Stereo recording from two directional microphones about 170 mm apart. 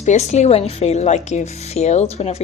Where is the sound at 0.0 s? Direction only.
40° left (ahead or behind).